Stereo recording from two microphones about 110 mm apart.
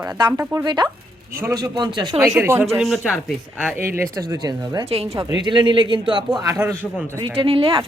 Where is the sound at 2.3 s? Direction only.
20° right (ahead or behind).